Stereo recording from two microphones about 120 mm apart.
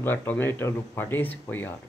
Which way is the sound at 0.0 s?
15° left (ahead or behind).